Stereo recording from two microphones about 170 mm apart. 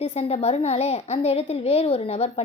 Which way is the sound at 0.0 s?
35° left (ahead or behind).